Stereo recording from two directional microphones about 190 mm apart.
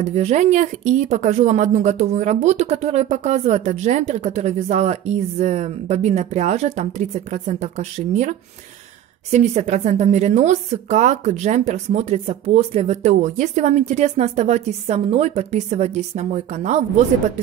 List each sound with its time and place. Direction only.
0.0 s speech: 35° right (ahead or behind)